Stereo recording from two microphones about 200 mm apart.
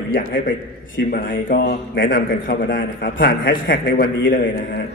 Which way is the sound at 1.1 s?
50° left (ahead or behind).